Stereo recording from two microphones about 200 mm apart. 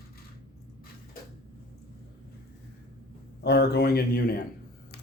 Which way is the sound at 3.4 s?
55° left (ahead or behind).